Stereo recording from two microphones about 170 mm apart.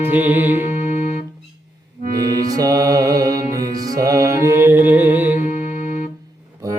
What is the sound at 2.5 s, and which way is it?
Mantra, 20° right (ahead or behind).